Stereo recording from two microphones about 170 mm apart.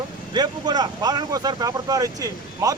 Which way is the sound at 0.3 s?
25° right (ahead or behind).